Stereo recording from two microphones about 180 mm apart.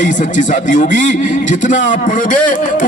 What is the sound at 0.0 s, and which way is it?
A man's voice, 45° left (ahead or behind).